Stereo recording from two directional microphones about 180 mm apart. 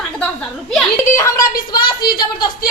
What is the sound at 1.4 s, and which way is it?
Speech, 55° left (ahead or behind).